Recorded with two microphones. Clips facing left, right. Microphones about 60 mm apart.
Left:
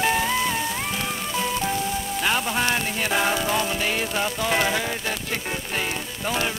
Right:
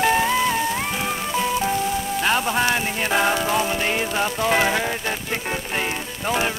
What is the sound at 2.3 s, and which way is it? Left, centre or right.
Music, centre.